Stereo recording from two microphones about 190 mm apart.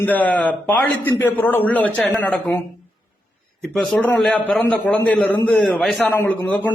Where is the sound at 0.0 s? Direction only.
10° left (ahead or behind).